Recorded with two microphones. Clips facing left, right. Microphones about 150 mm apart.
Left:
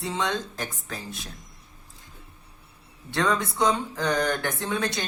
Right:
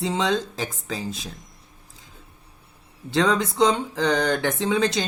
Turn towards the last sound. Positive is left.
turn(degrees=-85)